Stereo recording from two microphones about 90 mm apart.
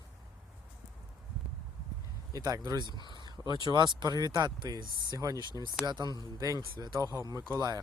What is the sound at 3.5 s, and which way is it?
Speech, 55° right (ahead or behind).